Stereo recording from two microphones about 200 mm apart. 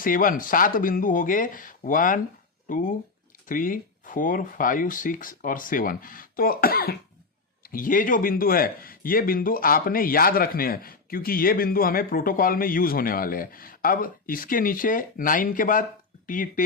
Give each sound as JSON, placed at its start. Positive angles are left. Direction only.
{"t": 0.0, "sound": "speech", "side_deg": 45}